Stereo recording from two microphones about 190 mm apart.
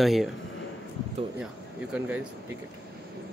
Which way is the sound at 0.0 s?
Centre (ahead or behind).